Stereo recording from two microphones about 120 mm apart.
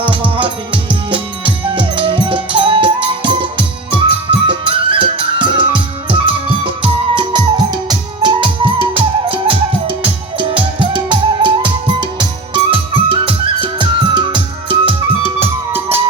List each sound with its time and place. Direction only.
0.0 s music: 45° right (ahead or behind)
15.4 s music: 20° right (ahead or behind)